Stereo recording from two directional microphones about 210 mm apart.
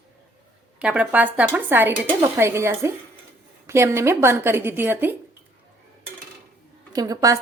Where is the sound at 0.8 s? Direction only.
5° right (ahead or behind).